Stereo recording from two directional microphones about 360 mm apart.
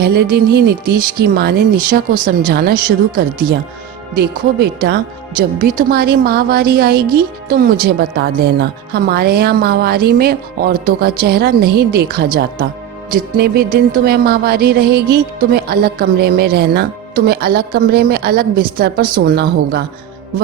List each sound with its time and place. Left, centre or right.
0.0 s music: right